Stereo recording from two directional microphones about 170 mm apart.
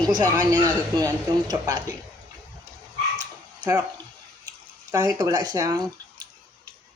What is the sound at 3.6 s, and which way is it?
Speech, 10° right (ahead or behind).